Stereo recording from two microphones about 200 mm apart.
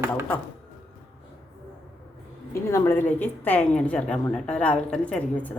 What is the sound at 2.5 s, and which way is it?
A woman's voice, 15° left (ahead or behind).